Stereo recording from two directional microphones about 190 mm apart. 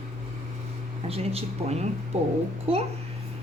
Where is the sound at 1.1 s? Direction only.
35° right (ahead or behind).